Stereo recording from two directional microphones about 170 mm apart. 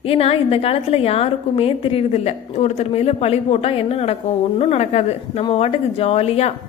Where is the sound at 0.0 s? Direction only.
35° left (ahead or behind).